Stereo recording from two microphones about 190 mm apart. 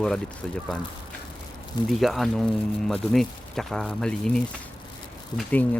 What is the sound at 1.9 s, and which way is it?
Speech, centre (ahead or behind).